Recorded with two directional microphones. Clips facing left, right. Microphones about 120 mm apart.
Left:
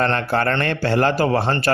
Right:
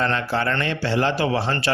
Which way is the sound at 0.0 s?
55° left (ahead or behind).